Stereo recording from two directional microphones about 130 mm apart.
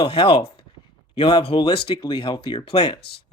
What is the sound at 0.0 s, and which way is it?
Speech, 45° left (ahead or behind).